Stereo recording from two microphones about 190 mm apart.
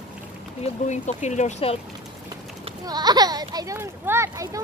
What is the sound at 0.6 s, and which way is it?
Speech, 35° left (ahead or behind).